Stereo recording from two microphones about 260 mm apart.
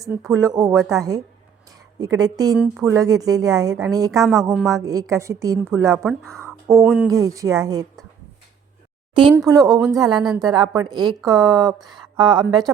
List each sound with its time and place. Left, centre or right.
0.3 s a woman's voice: centre
0.8 s speech: centre
2.0 s a woman's voice: centre
4.2 s a woman's voice: centre
6.3 s a sound: centre
6.8 s a woman's voice: centre
9.3 s a woman's voice: centre